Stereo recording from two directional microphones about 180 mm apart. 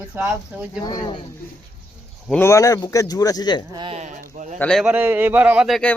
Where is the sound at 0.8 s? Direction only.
25° left (ahead or behind).